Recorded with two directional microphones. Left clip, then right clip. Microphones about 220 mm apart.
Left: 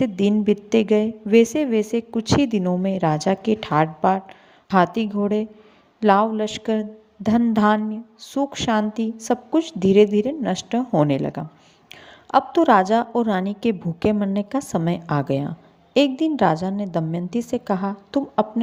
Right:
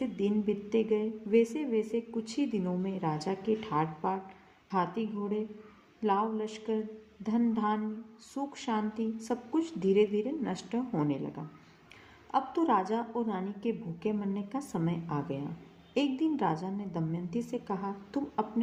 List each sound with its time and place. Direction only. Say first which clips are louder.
0.0 s a woman's voice: left 11 dB; 40° left (ahead or behind)